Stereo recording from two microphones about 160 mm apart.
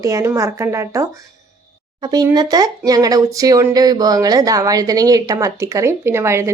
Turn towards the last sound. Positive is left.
turn(degrees=-15)  # may be behind; listen again after turning